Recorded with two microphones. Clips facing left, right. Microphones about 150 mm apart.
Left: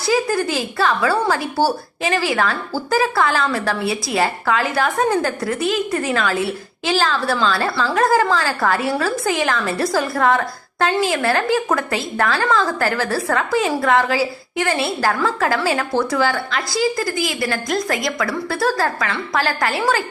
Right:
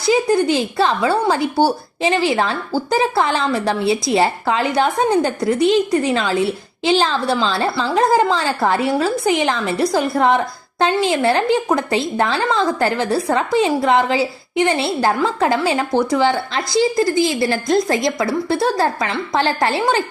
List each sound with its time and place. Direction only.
0.1 s a woman's voice: 20° right (ahead or behind)